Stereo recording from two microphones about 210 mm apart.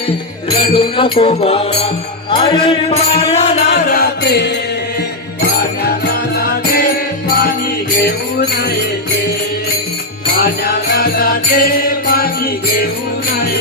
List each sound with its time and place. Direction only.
0.5 s music: 25° left (ahead or behind)
3.7 s music: 50° left (ahead or behind)
5.5 s music: 50° left (ahead or behind)
8.0 s music: 50° left (ahead or behind)
10.4 s music: 45° left (ahead or behind)